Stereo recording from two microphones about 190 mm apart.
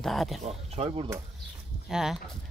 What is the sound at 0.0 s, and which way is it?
Speech, centre (ahead or behind).